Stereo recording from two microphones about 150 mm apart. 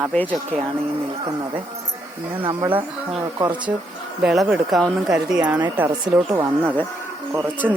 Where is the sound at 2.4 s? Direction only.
30° right (ahead or behind).